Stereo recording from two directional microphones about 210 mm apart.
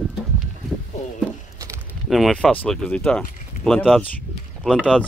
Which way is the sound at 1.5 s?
15° right (ahead or behind).